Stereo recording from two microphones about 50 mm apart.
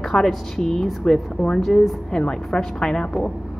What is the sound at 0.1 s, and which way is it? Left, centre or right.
A woman's voice, centre.